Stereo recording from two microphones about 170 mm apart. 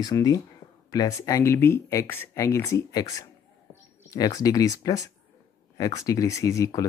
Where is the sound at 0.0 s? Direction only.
20° left (ahead or behind).